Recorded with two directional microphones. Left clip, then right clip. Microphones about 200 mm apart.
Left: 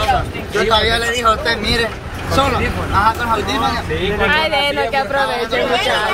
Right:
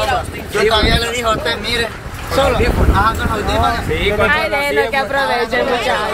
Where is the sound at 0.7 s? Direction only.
15° left (ahead or behind).